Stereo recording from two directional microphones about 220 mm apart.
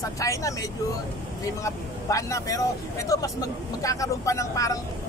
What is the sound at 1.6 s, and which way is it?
Speech, 15° left (ahead or behind).